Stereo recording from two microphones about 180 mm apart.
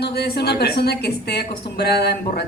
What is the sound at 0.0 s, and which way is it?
A woman's voice, 60° left (ahead or behind).